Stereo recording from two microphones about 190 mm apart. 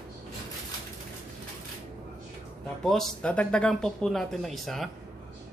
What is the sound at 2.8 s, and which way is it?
Speech, centre (ahead or behind).